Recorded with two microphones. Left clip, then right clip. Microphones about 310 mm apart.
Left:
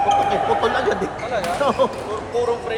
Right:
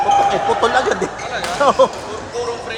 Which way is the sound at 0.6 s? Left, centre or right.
Right.